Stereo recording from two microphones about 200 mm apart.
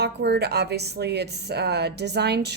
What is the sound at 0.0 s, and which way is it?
A woman's voice, 55° right (ahead or behind).